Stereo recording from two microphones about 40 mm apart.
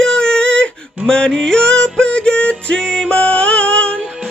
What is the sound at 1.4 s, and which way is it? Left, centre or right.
Music, centre.